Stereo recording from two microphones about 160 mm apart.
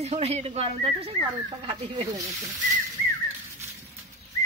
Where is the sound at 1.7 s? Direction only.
25° right (ahead or behind).